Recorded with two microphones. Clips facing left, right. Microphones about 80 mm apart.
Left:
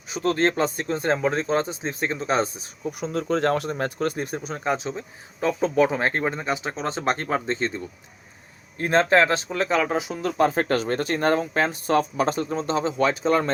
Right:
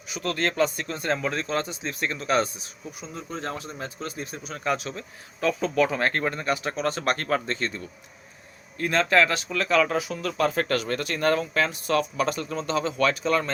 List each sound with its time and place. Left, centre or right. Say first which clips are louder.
0.1 s speech: left 6 dB; left
3.0 s speech: left 11 dB; left
4.4 s speech: left 2 dB; left
8.8 s speech: left 3 dB; left